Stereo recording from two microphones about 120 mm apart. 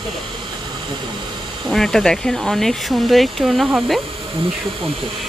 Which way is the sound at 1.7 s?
5° left (ahead or behind).